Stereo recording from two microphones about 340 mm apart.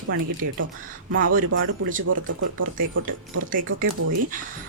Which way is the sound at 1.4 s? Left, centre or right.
Right.